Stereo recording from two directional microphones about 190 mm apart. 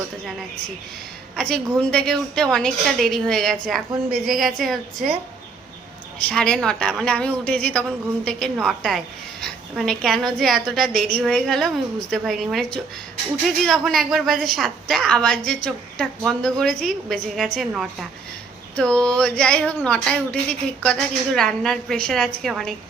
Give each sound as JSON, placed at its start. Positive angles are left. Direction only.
{"t": 1.4, "sound": "speech", "side_deg": 5}
{"t": 6.2, "sound": "speech", "side_deg": 5}